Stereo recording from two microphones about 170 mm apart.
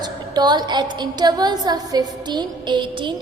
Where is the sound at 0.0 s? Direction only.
25° right (ahead or behind).